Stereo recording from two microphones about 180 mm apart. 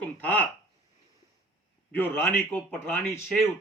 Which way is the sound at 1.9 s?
10° left (ahead or behind).